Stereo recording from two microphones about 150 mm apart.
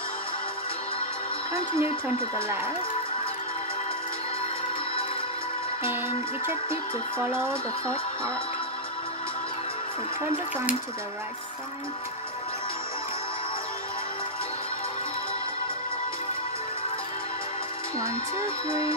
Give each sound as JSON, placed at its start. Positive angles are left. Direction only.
{"t": 1.5, "sound": "speech", "side_deg": -15}
{"t": 5.9, "sound": "speech", "side_deg": -15}